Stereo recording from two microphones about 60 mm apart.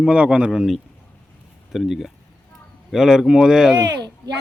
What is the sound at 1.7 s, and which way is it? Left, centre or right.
A man's voice, centre.